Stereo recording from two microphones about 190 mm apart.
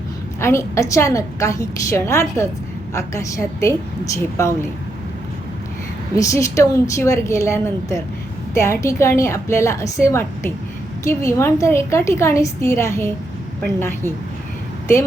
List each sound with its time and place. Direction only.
0.3 s a woman's voice: 15° left (ahead or behind)
6.1 s a woman's voice: 15° left (ahead or behind)